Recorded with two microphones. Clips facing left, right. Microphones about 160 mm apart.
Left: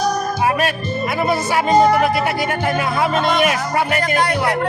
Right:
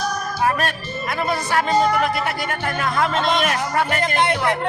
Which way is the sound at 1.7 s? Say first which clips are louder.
Left 6 dB; 40° left (ahead or behind).